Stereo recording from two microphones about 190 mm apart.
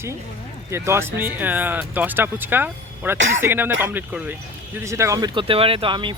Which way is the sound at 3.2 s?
80° right.